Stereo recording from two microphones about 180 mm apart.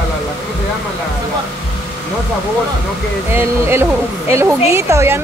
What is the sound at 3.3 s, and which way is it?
Speech, 15° right (ahead or behind).